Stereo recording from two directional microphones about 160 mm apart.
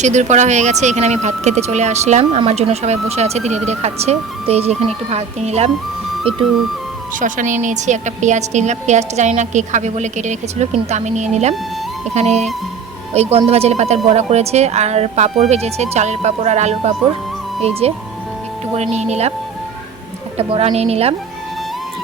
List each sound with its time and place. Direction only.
0.0 s a woman's voice: 45° right (ahead or behind)
7.2 s a woman's voice: 55° right (ahead or behind)
20.5 s speech: 35° right (ahead or behind)